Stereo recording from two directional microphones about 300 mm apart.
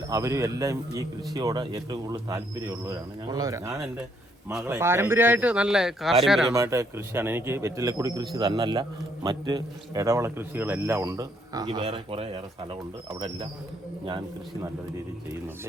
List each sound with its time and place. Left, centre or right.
0.1 s a man's voice: centre